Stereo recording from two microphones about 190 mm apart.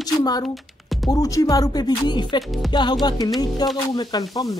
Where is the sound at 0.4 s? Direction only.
Centre (ahead or behind).